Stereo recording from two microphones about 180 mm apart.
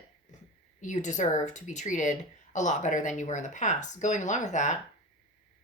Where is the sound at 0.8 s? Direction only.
45° left (ahead or behind).